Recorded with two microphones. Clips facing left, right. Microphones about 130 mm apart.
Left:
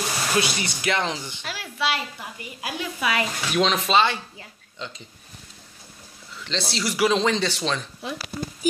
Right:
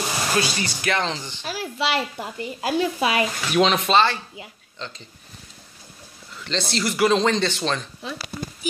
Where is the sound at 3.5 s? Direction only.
Centre (ahead or behind).